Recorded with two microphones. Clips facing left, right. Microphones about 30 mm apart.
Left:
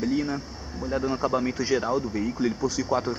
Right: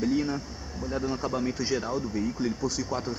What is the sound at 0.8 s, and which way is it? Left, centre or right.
Speech, centre.